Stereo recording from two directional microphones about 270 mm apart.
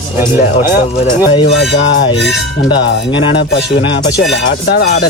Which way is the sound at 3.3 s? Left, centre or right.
Left.